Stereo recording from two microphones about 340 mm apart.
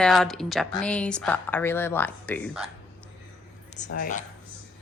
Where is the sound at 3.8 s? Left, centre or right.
Left.